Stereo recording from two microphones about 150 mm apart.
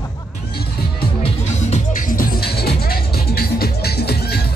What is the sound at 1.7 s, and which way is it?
Music, 65° left (ahead or behind).